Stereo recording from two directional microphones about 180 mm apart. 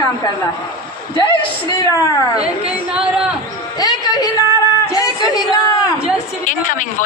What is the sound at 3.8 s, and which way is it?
A woman's voice, 20° left (ahead or behind).